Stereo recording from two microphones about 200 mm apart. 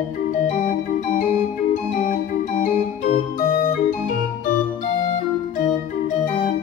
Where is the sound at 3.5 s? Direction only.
40° left (ahead or behind).